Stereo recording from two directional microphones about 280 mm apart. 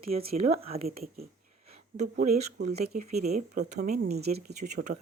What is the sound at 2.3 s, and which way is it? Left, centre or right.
Speech, right.